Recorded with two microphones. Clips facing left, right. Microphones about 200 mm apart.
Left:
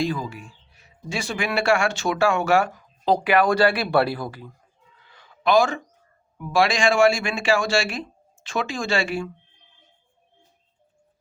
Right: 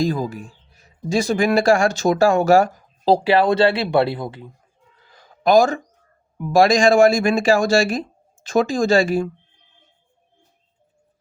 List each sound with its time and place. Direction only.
0.0 s speech: 40° right (ahead or behind); by 4.5 s 25° right (ahead or behind)
5.0 s a sound: 40° right (ahead or behind)
6.5 s speech: 40° right (ahead or behind)